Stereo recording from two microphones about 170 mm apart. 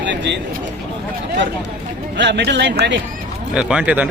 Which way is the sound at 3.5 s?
5° right (ahead or behind).